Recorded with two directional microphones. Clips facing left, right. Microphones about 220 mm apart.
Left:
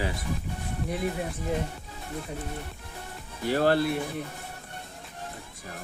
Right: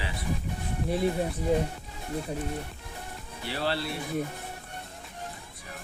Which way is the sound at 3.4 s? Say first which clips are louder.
Left 8 dB; 45° left (ahead or behind).